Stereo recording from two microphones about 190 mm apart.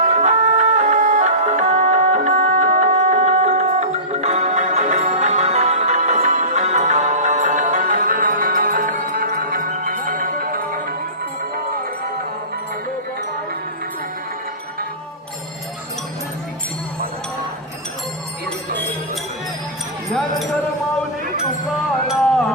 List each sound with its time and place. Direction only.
0.1 s music: 35° right (ahead or behind)
22.0 s music: 5° left (ahead or behind)